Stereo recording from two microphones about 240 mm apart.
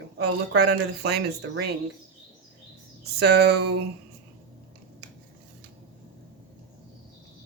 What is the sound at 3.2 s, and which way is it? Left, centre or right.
Speech, right.